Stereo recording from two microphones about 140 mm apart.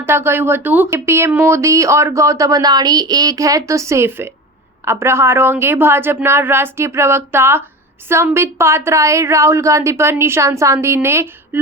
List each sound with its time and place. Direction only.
0.0 s a woman's voice: 15° right (ahead or behind)